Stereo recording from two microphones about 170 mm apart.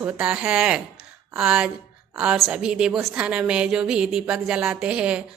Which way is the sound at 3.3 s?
5° right (ahead or behind).